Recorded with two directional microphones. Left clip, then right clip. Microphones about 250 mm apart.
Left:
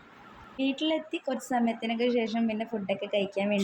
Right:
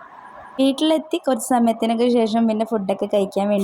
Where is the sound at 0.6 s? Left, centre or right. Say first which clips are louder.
Right 11 dB; right.